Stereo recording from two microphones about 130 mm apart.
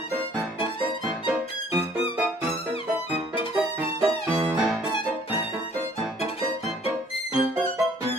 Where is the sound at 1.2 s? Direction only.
10° right (ahead or behind).